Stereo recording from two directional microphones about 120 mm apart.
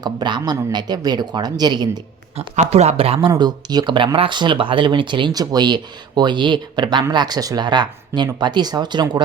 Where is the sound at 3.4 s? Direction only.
35° right (ahead or behind).